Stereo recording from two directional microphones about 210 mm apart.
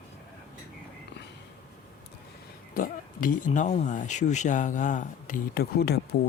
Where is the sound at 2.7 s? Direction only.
40° left (ahead or behind).